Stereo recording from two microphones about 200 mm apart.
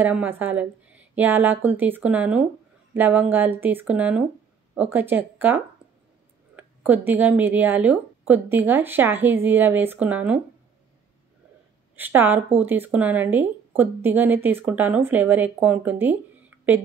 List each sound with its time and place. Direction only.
0.0 s a woman's voice: 10° right (ahead or behind)
11.9 s a woman's voice: 10° right (ahead or behind)